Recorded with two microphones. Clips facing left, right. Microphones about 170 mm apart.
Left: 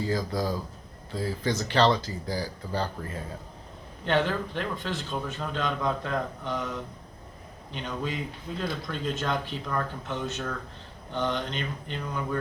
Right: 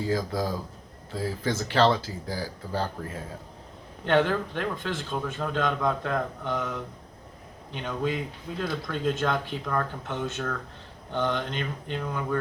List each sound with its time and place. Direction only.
0.0 s speech: 5° right (ahead or behind)
4.0 s a man's voice: 55° right (ahead or behind)
11.1 s mantra: 55° right (ahead or behind)